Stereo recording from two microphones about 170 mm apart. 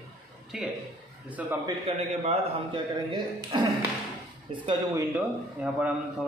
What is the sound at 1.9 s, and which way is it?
A man's voice, 35° right (ahead or behind).